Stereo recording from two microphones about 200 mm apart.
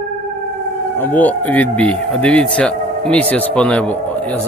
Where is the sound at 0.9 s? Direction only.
10° left (ahead or behind).